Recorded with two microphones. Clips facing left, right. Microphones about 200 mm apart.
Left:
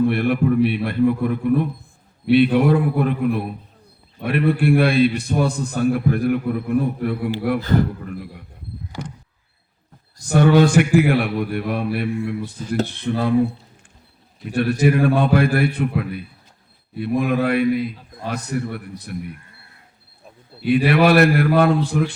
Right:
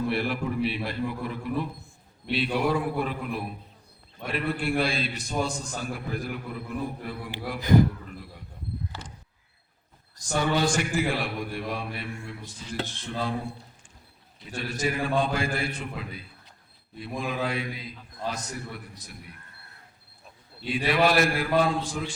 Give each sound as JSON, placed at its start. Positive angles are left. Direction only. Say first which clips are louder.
{"t": 0.1, "sound": "a man's voice", "louder": "left 9 dB", "side_deg": 55}
{"t": 7.6, "sound": "a man's voice", "louder": "right 4 dB", "side_deg": -15}
{"t": 8.9, "sound": "a sound", "louder": "left 10 dB", "side_deg": 15}
{"t": 10.2, "sound": "a man's voice", "louder": "left 11 dB", "side_deg": 60}
{"t": 14.4, "sound": "a man's voice", "louder": "left 12 dB", "side_deg": 60}
{"t": 20.7, "sound": "a man's voice", "louder": "left 8 dB", "side_deg": 60}